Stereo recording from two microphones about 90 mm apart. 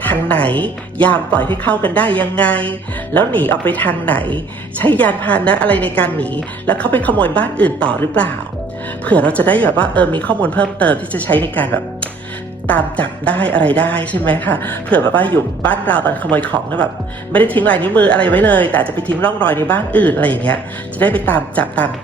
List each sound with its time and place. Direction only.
0.0 s a woman's voice: 15° left (ahead or behind)